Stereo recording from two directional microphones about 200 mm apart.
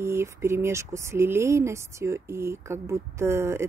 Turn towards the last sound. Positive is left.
turn(degrees=-15)  # may be behind; listen again after turning